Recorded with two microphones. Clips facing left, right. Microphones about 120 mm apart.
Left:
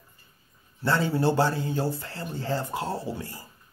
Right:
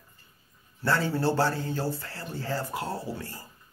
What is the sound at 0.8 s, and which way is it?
Speech, 20° left (ahead or behind).